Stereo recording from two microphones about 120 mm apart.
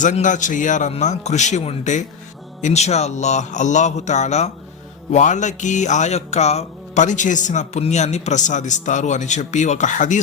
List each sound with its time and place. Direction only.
0.0 s speech: 90° left
2.6 s speech: 75° left (ahead or behind)
5.1 s music: 90° left